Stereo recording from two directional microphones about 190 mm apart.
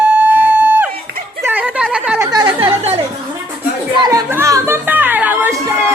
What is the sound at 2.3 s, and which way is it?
Chatter, 20° right (ahead or behind).